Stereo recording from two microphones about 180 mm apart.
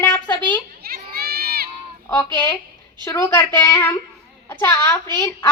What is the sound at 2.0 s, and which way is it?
A woman's voice, 10° left (ahead or behind).